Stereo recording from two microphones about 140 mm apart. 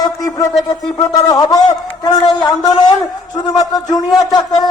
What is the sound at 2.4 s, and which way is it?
Speech, 30° left (ahead or behind).